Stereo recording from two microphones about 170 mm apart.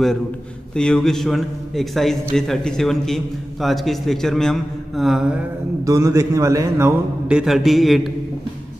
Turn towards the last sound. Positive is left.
turn(degrees=0)  # may be behind; listen again after turning